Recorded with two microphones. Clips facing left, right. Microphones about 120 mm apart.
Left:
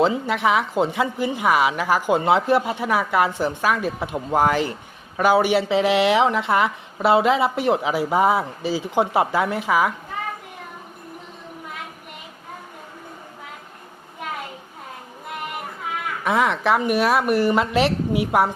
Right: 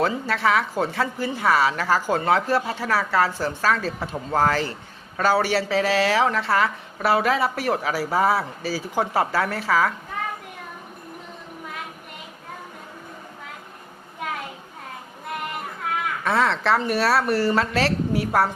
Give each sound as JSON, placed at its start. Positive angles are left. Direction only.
{"t": 0.0, "sound": "speech", "side_deg": 20}
{"t": 16.2, "sound": "speech", "side_deg": 15}